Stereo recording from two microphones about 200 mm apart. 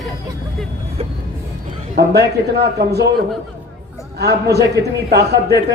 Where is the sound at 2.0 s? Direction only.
55° right (ahead or behind).